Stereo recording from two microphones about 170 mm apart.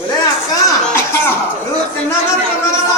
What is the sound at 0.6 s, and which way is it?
Speech, 15° left (ahead or behind).